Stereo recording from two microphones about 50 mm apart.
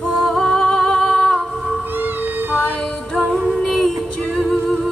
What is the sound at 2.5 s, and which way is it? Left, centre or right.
Music, left.